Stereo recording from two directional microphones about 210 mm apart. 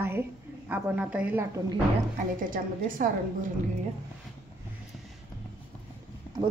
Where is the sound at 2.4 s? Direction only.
40° right (ahead or behind).